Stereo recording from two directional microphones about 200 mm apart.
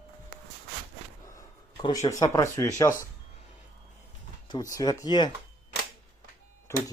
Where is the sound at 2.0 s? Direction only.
15° left (ahead or behind).